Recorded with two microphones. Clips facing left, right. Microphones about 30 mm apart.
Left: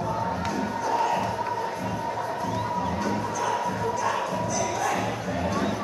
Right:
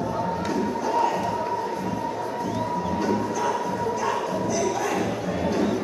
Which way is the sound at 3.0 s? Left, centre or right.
Centre.